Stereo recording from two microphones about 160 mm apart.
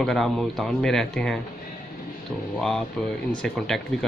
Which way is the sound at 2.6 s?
5° left (ahead or behind).